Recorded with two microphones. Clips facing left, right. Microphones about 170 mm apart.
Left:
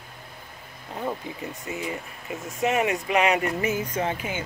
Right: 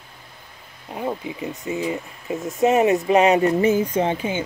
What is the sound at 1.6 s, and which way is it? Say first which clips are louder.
Speech: right 7 dB; 25° right (ahead or behind).